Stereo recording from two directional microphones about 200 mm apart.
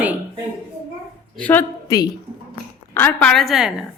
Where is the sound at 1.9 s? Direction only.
20° left (ahead or behind); by 3.8 s centre (ahead or behind).